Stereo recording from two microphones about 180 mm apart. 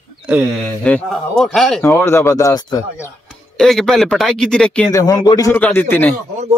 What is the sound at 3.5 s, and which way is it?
Speech, 5° left (ahead or behind).